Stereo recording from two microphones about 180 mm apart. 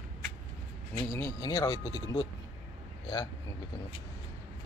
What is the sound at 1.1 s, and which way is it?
Speech, 20° left (ahead or behind).